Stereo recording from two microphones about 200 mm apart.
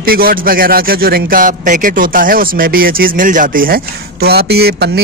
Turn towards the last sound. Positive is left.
turn(degrees=-55)  # may be behind; listen again after turning